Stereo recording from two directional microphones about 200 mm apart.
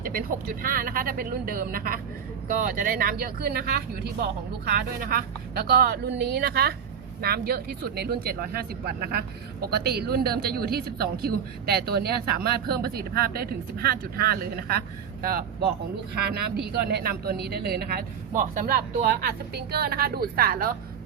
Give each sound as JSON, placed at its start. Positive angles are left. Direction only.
{"t": 0.0, "sound": "speech", "side_deg": -45}
{"t": 16.8, "sound": "speech", "side_deg": -50}